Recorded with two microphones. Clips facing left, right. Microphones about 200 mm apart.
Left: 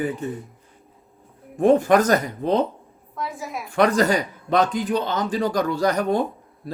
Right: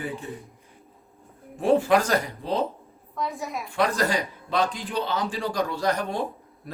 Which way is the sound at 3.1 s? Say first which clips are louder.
Even; centre (ahead or behind).